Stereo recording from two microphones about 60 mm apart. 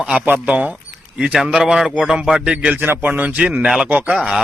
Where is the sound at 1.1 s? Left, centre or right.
Centre; by 4.1 s right.